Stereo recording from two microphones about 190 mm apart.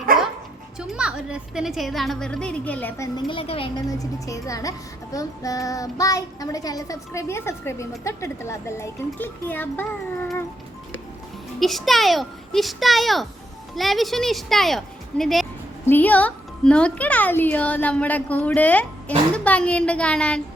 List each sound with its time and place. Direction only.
0.8 s a woman's voice: 5° right (ahead or behind)
3.2 s a woman's voice: 25° left (ahead or behind)
5.1 s child singing: 20° left (ahead or behind)
11.6 s a woman's voice: centre (ahead or behind)
15.9 s child singing: 10° left (ahead or behind)